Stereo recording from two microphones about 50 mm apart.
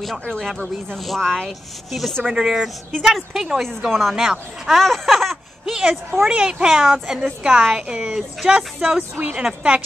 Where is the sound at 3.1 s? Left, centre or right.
Centre.